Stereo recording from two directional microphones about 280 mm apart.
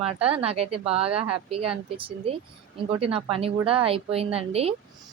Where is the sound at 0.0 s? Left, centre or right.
Right.